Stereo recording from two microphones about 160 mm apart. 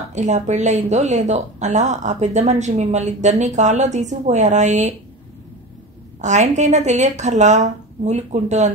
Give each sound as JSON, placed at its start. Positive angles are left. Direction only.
{"t": 0.1, "sound": "speech", "side_deg": -45}
{"t": 6.2, "sound": "speech", "side_deg": -45}